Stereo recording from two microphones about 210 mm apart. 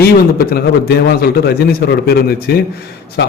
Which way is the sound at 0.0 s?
45° left (ahead or behind).